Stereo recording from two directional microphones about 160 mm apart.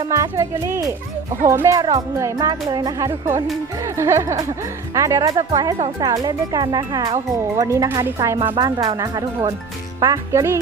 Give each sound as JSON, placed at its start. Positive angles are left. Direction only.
{"t": 0.0, "sound": "speech", "side_deg": -20}